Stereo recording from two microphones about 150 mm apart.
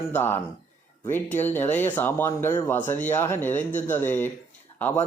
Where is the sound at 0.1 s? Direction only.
15° left (ahead or behind).